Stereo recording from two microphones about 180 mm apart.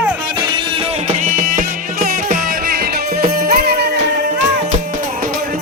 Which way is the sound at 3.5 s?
60° right (ahead or behind).